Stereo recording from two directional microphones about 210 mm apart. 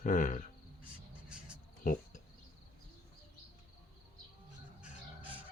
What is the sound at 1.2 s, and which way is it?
Cricket, 5° right (ahead or behind).